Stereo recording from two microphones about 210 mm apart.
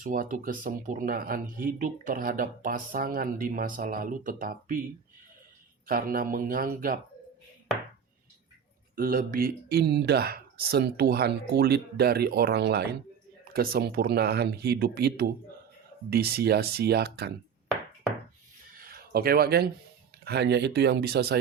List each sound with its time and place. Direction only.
0.0 s speech: 40° right (ahead or behind)
5.8 s speech: 45° right (ahead or behind)
9.0 s speech: 40° right (ahead or behind)
18.8 s speech: 45° right (ahead or behind)